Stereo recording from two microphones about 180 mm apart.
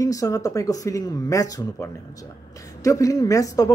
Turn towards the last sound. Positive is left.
turn(degrees=20)  # may be behind; listen again after turning